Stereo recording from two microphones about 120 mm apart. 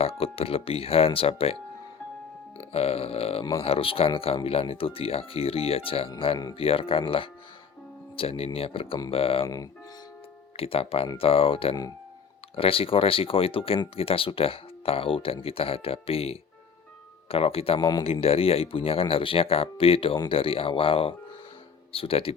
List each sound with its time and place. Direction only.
0.0 s speech: 55° left (ahead or behind)
2.7 s burping: 55° left (ahead or behind)
3.6 s speech: 50° left (ahead or behind)
10.6 s speech: 50° left (ahead or behind)